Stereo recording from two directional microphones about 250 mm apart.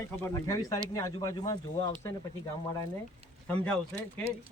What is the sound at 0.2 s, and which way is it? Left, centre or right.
Speech, centre.